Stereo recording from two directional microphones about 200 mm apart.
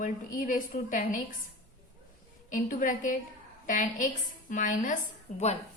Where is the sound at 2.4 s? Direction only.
40° left (ahead or behind).